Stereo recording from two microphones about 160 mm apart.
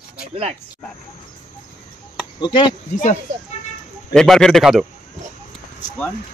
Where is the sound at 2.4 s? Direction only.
30° left (ahead or behind).